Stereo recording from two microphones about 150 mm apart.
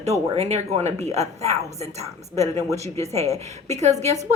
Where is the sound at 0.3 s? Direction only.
45° right (ahead or behind).